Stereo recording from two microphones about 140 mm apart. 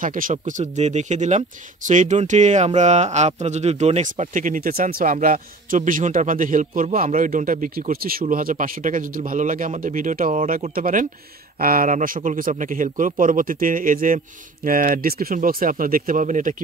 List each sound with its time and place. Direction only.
0.0 s speech: 75° right (ahead or behind)
7.1 s speech: 70° right (ahead or behind)